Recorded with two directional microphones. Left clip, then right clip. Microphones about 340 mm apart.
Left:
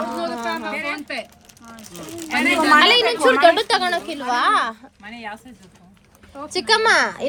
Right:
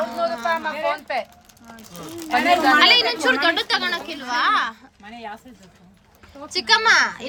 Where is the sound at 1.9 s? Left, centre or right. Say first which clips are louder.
Left 1 dB; centre.